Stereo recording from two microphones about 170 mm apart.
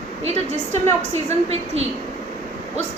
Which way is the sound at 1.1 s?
40° right (ahead or behind).